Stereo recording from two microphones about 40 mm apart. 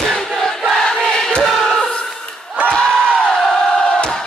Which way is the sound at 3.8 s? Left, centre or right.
Left.